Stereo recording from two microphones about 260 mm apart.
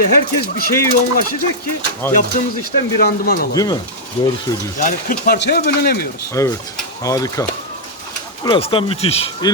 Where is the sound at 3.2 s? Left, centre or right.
Left.